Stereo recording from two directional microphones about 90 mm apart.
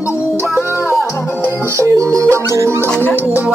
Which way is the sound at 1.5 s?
30° right (ahead or behind).